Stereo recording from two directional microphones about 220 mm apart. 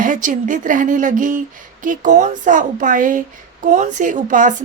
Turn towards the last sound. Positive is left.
turn(degrees=-35)  # may be behind; listen again after turning